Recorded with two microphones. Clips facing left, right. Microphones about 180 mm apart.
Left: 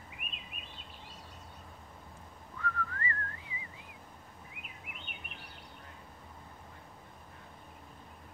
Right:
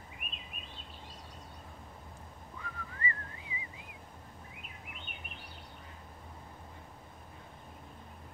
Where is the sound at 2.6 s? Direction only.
15° right (ahead or behind).